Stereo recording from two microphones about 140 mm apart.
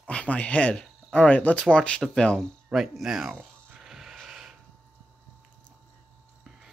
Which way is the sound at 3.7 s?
5° right (ahead or behind).